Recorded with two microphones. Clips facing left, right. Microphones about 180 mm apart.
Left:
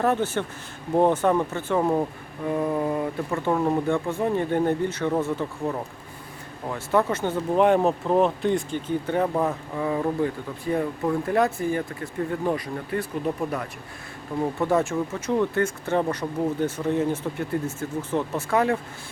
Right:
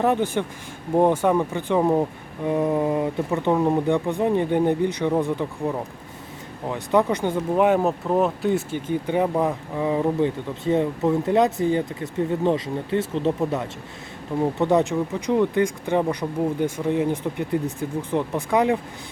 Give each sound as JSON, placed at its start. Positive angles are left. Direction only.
{"t": 0.0, "sound": "speech", "side_deg": -15}